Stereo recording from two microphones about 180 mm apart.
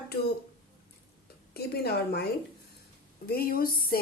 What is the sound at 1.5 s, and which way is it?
A woman's voice, 60° left (ahead or behind).